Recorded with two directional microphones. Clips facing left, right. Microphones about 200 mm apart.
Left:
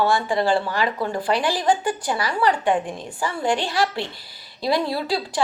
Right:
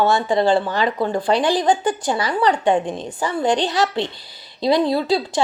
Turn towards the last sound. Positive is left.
turn(degrees=-20)  # may be behind; listen again after turning